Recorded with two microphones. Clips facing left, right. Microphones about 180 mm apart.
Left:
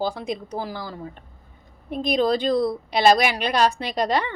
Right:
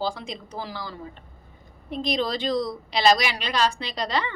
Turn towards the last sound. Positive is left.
turn(degrees=50)  # may be behind; listen again after turning